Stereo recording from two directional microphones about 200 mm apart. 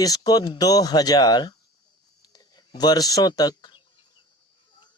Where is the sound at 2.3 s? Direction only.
20° left (ahead or behind).